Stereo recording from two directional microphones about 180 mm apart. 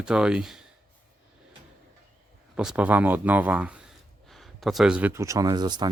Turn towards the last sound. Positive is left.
turn(degrees=-25)  # may be behind; listen again after turning